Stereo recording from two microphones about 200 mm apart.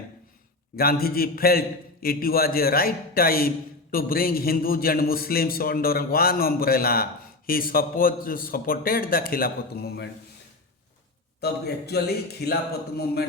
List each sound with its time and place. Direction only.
0.8 s a man's voice: 50° left (ahead or behind)
11.3 s a man's voice: 55° left (ahead or behind)